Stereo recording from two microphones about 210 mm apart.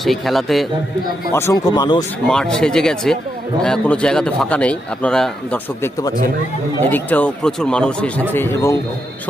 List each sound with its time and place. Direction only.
0.0 s a man's voice: centre (ahead or behind)
1.3 s speech: 10° left (ahead or behind)
2.3 s a man's voice: 5° left (ahead or behind)
6.9 s speech: 10° left (ahead or behind)